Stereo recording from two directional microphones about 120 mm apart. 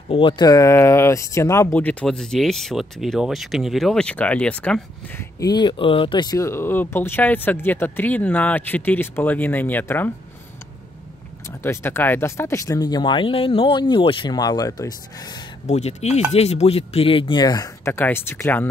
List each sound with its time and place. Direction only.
0.1 s speech: 45° left (ahead or behind)
0.5 s speech: 25° left (ahead or behind)
2.0 s speech: 5° left (ahead or behind)
5.4 s speech: 35° left (ahead or behind)
6.3 s speech: 25° left (ahead or behind)
11.6 s speech: 20° left (ahead or behind)
15.6 s speech: 70° left (ahead or behind); by 17.9 s 30° left (ahead or behind)
17.9 s speech: 20° left (ahead or behind)